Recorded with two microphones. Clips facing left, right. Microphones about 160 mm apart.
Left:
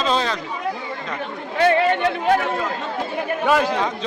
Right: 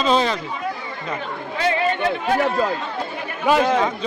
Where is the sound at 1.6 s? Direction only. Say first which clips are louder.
Left 4 dB; 55° left (ahead or behind).